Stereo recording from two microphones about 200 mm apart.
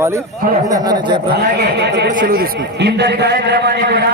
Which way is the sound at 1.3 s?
55° right (ahead or behind).